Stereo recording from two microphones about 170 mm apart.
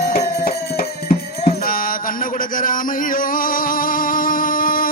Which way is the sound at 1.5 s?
55° left (ahead or behind).